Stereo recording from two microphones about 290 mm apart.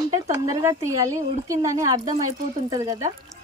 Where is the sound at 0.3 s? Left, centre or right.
Centre.